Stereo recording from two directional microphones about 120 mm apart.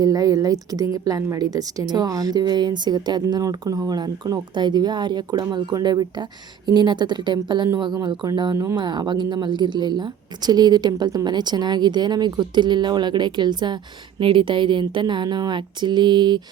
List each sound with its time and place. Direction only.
0.0 s a woman's voice: 30° right (ahead or behind)